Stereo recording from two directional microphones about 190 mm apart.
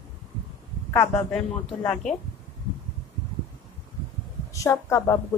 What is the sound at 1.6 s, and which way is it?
Speech, centre (ahead or behind).